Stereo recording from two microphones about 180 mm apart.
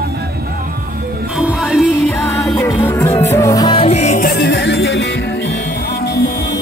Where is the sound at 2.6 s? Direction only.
15° left (ahead or behind); by 6.4 s 55° left (ahead or behind).